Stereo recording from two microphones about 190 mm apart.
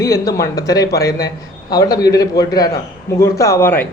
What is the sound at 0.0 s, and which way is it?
A man's voice, 20° left (ahead or behind).